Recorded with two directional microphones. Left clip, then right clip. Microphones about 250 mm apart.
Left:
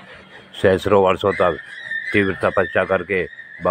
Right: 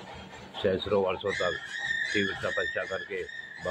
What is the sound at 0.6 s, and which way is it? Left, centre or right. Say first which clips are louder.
Speech: left 12 dB; left.